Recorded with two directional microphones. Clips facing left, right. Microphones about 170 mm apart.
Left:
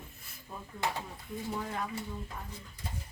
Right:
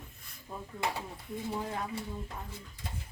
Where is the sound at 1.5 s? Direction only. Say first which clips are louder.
Right 1 dB; 25° right (ahead or behind).